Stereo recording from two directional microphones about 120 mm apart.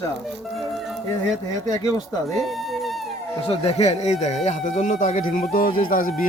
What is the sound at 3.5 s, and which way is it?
Speech, 60° left (ahead or behind).